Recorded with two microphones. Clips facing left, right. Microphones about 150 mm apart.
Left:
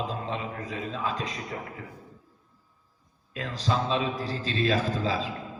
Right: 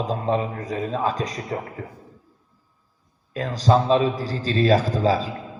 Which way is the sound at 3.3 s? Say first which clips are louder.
Right 9 dB; 40° right (ahead or behind).